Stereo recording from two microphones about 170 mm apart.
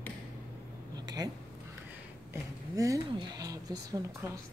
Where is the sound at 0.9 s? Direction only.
25° right (ahead or behind).